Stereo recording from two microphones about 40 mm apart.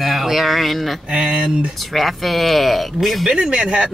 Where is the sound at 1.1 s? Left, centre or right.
Right.